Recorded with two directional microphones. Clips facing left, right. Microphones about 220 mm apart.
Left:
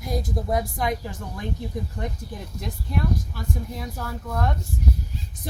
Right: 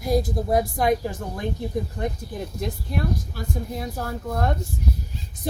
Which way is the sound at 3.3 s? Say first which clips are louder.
Right 2 dB; 40° right (ahead or behind).